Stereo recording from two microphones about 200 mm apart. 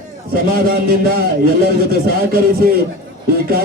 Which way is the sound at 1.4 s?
50° right (ahead or behind).